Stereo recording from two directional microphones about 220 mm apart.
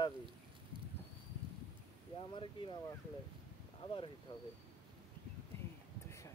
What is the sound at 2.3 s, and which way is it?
Speech, 20° left (ahead or behind).